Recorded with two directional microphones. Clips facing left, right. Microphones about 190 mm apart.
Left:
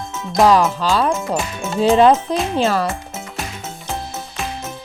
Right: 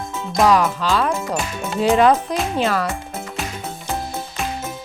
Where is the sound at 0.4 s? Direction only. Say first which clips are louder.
Left 2 dB; 30° left (ahead or behind).